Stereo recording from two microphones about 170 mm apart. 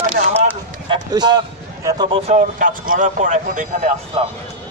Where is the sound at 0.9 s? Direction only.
25° right (ahead or behind).